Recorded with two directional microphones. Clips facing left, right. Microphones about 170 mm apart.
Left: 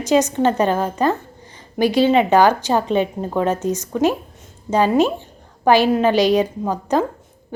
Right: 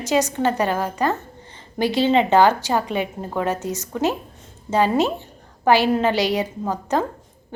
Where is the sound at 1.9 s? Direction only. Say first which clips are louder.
Left 2 dB; 15° left (ahead or behind).